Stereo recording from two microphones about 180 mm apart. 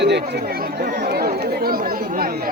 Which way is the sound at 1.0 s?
60° right (ahead or behind).